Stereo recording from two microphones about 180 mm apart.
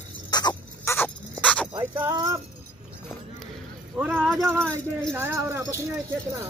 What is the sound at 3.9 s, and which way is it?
Speech, 5° right (ahead or behind).